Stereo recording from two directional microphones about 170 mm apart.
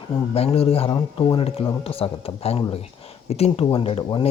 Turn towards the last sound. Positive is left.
turn(degrees=35)  # may be behind; listen again after turning